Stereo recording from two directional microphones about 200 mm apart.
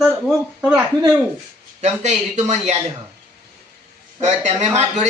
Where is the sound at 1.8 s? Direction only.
35° right (ahead or behind).